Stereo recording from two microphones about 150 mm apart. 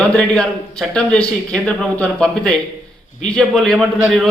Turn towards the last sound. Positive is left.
turn(degrees=0)  # may be behind; listen again after turning